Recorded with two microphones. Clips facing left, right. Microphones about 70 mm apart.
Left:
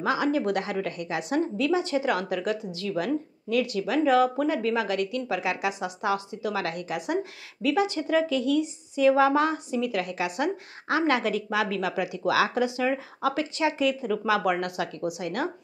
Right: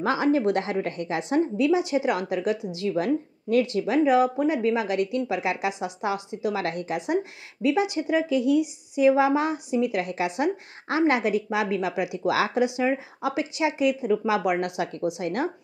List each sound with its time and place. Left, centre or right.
0.0 s a woman's voice: right
1.6 s speech: centre